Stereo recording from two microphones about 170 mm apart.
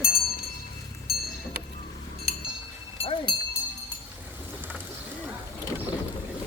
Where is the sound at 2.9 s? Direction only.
30° left (ahead or behind).